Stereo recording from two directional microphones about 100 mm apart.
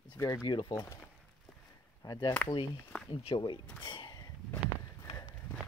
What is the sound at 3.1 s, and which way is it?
Speech, 60° left (ahead or behind).